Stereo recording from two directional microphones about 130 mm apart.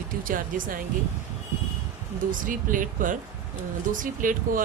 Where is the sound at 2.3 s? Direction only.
90° right.